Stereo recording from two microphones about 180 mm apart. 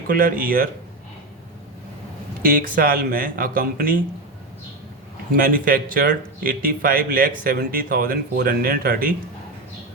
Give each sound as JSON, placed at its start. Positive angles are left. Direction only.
{"t": 0.1, "sound": "speech", "side_deg": -50}
{"t": 2.4, "sound": "speech", "side_deg": -50}
{"t": 5.3, "sound": "speech", "side_deg": -50}